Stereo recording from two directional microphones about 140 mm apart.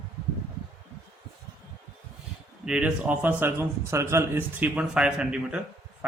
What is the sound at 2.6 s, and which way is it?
A man's voice, 5° right (ahead or behind).